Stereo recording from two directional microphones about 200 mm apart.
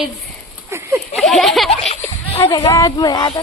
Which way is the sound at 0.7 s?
15° right (ahead or behind).